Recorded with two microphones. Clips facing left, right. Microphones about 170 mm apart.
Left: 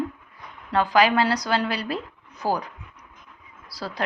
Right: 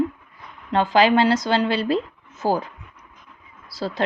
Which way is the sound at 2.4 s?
25° right (ahead or behind).